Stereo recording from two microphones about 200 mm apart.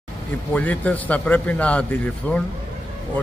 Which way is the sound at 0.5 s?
5° left (ahead or behind).